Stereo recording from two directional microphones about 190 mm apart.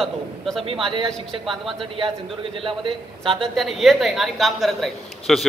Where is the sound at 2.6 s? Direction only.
25° right (ahead or behind).